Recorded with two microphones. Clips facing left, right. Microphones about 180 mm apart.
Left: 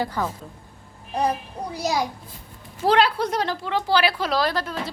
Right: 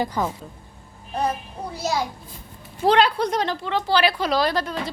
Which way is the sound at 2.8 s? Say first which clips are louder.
Right 1 dB; 5° left (ahead or behind).